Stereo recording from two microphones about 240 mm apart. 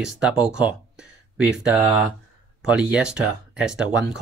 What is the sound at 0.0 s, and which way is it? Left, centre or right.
Speech, centre.